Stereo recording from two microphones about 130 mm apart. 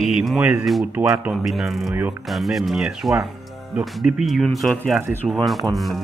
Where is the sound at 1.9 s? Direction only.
15° right (ahead or behind).